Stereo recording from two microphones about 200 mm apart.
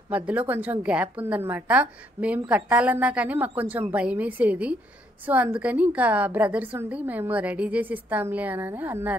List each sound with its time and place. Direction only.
0.1 s a woman's voice: 5° right (ahead or behind)